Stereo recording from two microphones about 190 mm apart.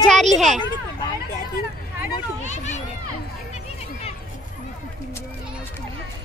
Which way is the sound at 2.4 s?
40° left (ahead or behind).